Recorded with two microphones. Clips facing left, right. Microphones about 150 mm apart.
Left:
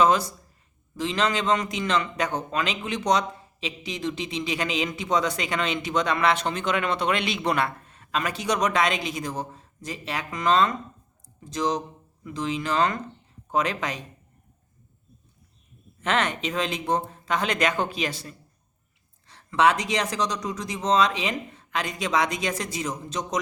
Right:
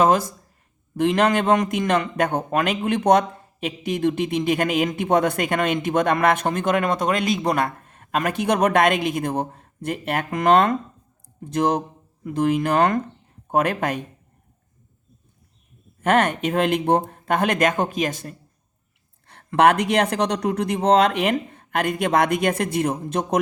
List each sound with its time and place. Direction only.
0.0 s a man's voice: 50° right (ahead or behind)
16.0 s a man's voice: 50° right (ahead or behind)